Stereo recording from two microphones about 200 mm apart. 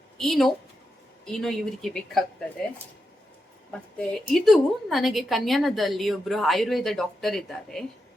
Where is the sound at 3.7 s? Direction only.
5° left (ahead or behind).